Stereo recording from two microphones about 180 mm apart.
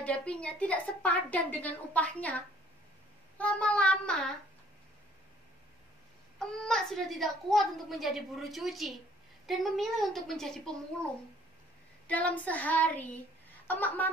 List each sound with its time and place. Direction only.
0.0 s a woman's voice: 5° left (ahead or behind)
6.4 s a woman's voice: centre (ahead or behind)
12.1 s a woman's voice: 10° left (ahead or behind)